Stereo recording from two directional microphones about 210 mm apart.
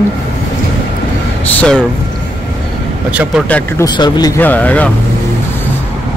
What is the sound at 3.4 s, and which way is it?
Speech, 5° left (ahead or behind).